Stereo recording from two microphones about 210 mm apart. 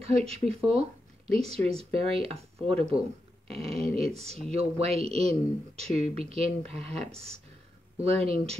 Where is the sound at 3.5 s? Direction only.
30° right (ahead or behind).